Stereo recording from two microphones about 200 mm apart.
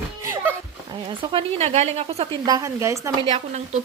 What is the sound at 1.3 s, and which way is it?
Speech, 35° right (ahead or behind).